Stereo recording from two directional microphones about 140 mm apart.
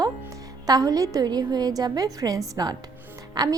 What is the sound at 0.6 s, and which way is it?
A woman's voice, 25° right (ahead or behind).